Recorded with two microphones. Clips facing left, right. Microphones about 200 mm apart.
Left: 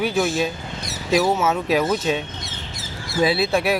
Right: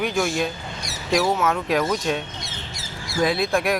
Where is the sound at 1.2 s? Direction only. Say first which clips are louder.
Even; 25° left (ahead or behind).